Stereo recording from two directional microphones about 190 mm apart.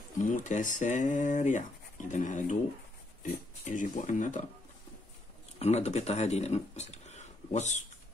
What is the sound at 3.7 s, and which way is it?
Speech, 40° left (ahead or behind).